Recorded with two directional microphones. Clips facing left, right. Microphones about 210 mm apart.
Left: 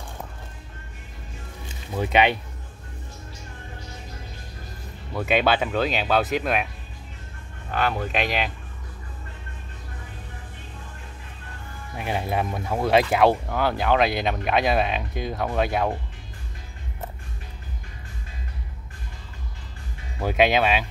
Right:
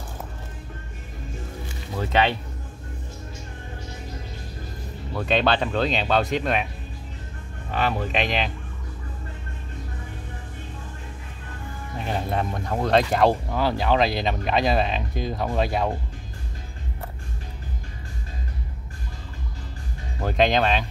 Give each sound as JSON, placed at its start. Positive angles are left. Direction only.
{"t": 2.0, "sound": "speech", "side_deg": 15}
{"t": 5.1, "sound": "speech", "side_deg": 5}
{"t": 7.7, "sound": "speech", "side_deg": 0}
{"t": 12.0, "sound": "speech", "side_deg": 10}
{"t": 20.2, "sound": "speech", "side_deg": 5}